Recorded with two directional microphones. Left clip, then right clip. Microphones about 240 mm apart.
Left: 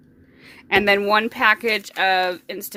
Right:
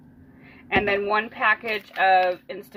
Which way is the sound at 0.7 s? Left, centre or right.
Left.